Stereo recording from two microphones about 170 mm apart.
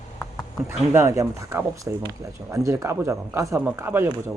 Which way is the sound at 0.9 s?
20° right (ahead or behind).